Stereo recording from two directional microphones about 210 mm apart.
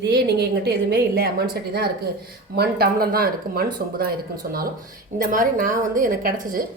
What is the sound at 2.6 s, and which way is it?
A woman's voice, 45° right (ahead or behind).